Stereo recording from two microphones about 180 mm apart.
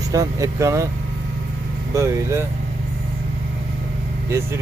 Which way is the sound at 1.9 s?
15° right (ahead or behind).